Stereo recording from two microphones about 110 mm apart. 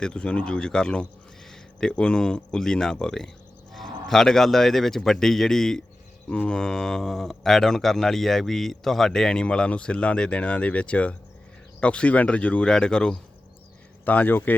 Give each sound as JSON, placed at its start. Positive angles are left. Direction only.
{"t": 0.0, "sound": "speech", "side_deg": 10}